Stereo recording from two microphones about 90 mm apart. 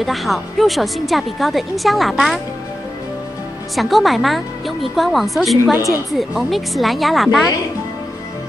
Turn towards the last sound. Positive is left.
turn(degrees=0)  # may be behind; listen again after turning